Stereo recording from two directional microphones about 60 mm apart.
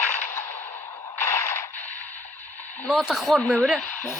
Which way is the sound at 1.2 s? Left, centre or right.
Left.